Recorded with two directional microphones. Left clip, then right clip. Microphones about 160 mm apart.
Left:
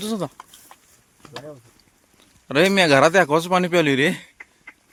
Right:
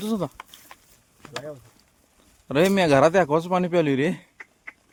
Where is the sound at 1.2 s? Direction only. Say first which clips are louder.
Right 2 dB; 5° left (ahead or behind).